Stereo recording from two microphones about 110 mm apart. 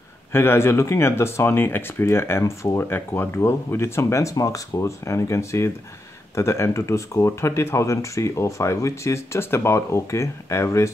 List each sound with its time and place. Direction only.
0.3 s speech: 20° left (ahead or behind)